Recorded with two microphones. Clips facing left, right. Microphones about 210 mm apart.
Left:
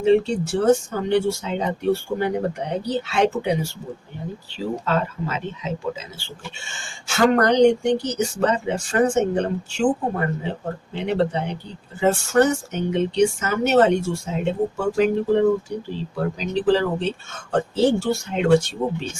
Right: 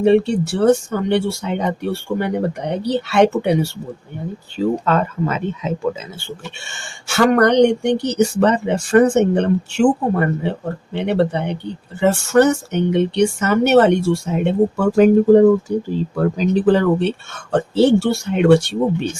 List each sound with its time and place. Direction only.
0.0 s speech: 65° right (ahead or behind)
4.5 s speech: 50° right (ahead or behind)
6.7 s speech: 70° right (ahead or behind)